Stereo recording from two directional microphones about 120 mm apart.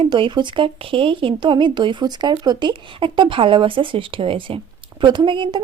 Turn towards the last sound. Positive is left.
turn(degrees=-45)  # may be behind; listen again after turning